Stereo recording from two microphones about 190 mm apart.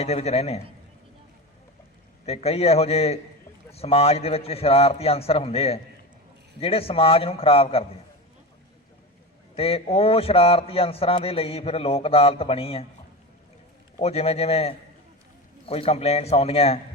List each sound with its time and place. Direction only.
0.0 s a man's voice: 35° left (ahead or behind)
2.2 s a man's voice: 35° left (ahead or behind)
9.6 s a man's voice: 30° left (ahead or behind)
14.0 s a man's voice: 35° left (ahead or behind)